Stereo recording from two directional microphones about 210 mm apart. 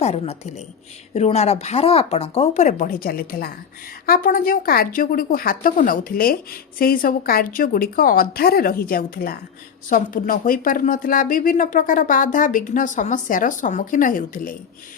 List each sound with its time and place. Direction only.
0.0 s a woman's voice: 30° left (ahead or behind)